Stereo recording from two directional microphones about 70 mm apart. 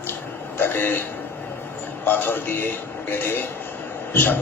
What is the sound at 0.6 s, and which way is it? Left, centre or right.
Speech, left.